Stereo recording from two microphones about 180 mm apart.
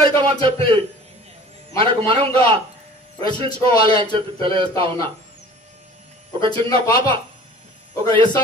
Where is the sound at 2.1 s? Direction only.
30° right (ahead or behind).